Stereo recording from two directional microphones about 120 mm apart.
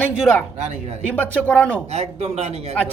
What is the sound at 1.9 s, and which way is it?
Speech, 65° right (ahead or behind).